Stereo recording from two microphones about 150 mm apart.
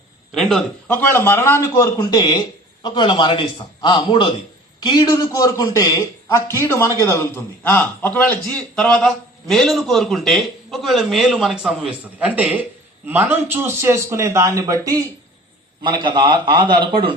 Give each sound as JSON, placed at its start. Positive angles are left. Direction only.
{"t": 0.3, "sound": "a man's voice", "side_deg": 0}
{"t": 0.9, "sound": "a man's voice", "side_deg": 15}